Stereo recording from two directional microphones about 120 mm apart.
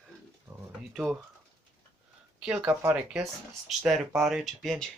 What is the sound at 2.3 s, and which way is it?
Speech, 10° right (ahead or behind).